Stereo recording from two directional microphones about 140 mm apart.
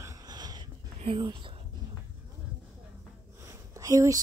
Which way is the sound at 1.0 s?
40° right (ahead or behind).